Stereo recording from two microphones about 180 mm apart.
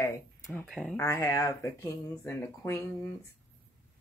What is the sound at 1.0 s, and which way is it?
Speech, 15° left (ahead or behind).